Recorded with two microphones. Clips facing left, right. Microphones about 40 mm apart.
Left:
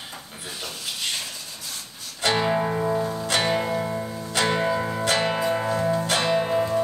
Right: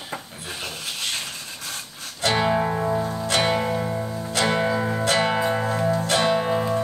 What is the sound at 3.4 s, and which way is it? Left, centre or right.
Music, centre.